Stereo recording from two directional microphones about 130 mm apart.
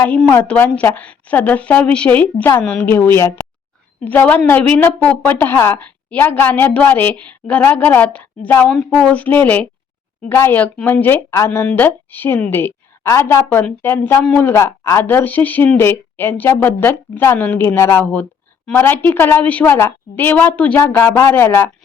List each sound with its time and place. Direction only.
0.3 s speech: 10° left (ahead or behind)